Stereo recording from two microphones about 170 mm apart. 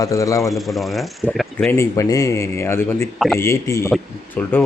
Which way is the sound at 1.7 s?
15° left (ahead or behind).